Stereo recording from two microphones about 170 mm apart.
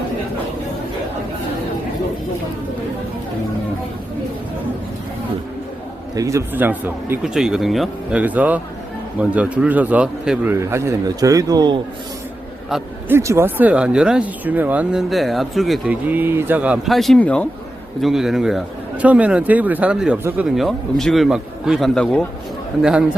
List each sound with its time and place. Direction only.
6.1 s a man's voice: 20° right (ahead or behind)
12.7 s speech: 15° right (ahead or behind); by 22.3 s 5° left (ahead or behind)
22.8 s speech: 5° right (ahead or behind)